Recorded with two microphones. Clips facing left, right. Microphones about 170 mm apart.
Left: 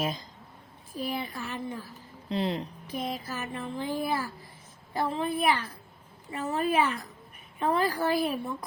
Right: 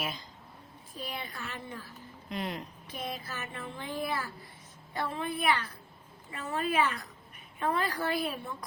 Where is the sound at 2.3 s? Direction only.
30° left (ahead or behind).